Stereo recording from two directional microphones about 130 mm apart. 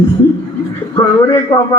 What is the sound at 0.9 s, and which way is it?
Speech, 25° left (ahead or behind).